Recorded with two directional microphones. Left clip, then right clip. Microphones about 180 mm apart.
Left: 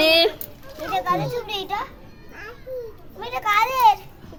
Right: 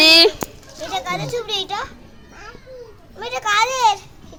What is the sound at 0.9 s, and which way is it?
Speech, 10° left (ahead or behind).